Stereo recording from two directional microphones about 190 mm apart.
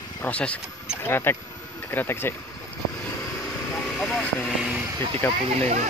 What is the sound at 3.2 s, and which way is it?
Vehicle, 15° left (ahead or behind).